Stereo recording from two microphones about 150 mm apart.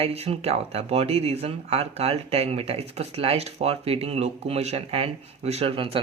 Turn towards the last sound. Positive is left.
turn(degrees=-35)  # may be behind; listen again after turning